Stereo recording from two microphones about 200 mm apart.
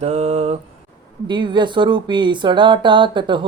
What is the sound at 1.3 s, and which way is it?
Speech, 25° right (ahead or behind).